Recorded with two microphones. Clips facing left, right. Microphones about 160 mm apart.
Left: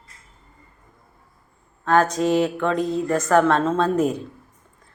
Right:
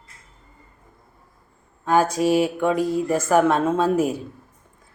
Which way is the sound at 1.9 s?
10° right (ahead or behind).